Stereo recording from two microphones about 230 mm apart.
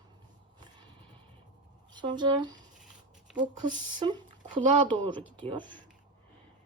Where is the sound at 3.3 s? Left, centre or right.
Centre.